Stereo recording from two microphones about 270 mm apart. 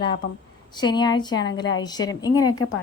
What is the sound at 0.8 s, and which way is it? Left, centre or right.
A woman's voice, centre.